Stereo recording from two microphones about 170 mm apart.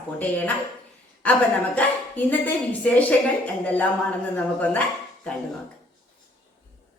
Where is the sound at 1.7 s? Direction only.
10° left (ahead or behind).